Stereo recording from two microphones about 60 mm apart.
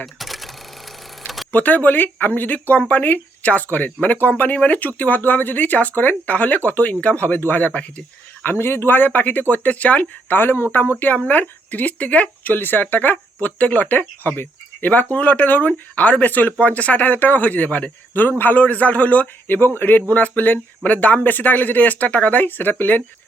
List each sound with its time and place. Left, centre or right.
0.0 s cash register: centre
1.5 s speech: left
8.4 s speech: left